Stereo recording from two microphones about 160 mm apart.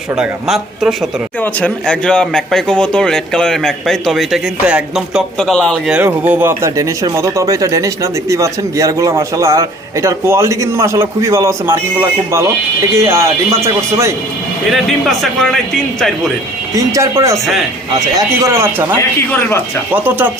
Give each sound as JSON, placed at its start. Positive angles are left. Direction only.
{"t": 0.2, "sound": "speech", "side_deg": 0}
{"t": 6.0, "sound": "speech", "side_deg": -10}
{"t": 14.7, "sound": "speech", "side_deg": 0}
{"t": 16.7, "sound": "speech", "side_deg": -20}
{"t": 18.4, "sound": "speech", "side_deg": -15}
{"t": 18.9, "sound": "speech", "side_deg": 15}
{"t": 19.9, "sound": "speech", "side_deg": -10}